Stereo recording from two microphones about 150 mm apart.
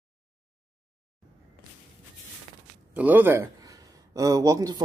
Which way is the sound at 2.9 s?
10° right (ahead or behind).